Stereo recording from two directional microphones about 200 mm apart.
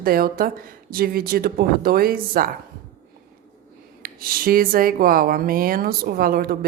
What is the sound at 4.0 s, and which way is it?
Speech, 45° right (ahead or behind).